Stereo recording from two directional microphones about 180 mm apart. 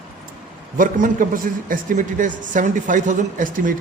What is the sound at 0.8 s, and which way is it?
A man's voice, 50° right (ahead or behind).